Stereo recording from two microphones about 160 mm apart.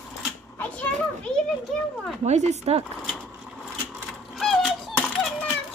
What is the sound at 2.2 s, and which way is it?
Speech, 45° right (ahead or behind).